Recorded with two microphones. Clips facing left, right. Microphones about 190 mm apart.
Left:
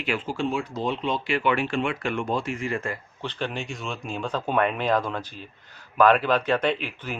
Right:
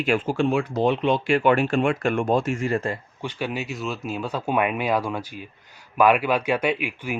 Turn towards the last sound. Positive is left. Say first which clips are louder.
# right 1 dB
turn(degrees=-10)  # may be behind; listen again after turning